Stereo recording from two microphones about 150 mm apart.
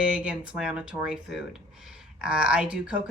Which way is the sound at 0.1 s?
5° right (ahead or behind).